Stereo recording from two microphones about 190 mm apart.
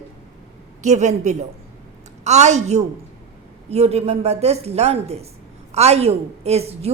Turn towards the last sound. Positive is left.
turn(degrees=-35)  # may be behind; listen again after turning